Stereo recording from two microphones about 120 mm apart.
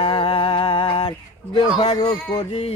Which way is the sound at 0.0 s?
45° left (ahead or behind).